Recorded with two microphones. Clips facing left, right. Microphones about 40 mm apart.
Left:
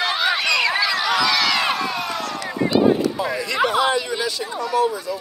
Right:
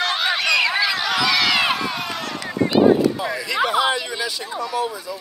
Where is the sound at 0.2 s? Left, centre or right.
Centre.